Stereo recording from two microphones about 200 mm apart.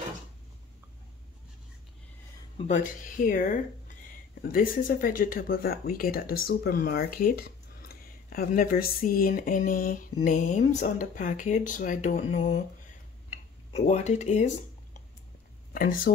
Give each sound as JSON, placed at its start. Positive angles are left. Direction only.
{"t": 2.7, "sound": "speech", "side_deg": 40}
{"t": 13.7, "sound": "speech", "side_deg": 35}
{"t": 15.7, "sound": "speech", "side_deg": 45}